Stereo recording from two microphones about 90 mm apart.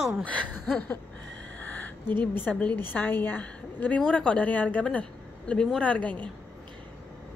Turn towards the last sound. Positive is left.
turn(degrees=15)  # may be behind; listen again after turning